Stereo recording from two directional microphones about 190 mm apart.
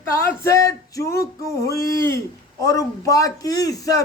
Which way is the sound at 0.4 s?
15° left (ahead or behind).